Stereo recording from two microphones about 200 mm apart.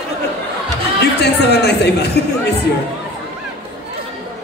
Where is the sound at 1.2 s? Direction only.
55° left (ahead or behind).